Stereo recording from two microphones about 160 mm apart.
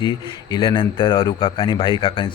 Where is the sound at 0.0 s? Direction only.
30° left (ahead or behind).